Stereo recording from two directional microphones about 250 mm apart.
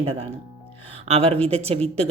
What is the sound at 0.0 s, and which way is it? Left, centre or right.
Speech, right.